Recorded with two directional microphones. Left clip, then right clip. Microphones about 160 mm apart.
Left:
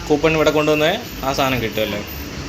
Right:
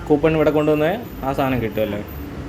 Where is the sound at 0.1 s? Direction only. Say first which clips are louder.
Left 1 dB; 25° right (ahead or behind).